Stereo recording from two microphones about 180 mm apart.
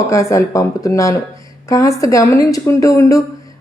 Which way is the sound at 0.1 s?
15° left (ahead or behind).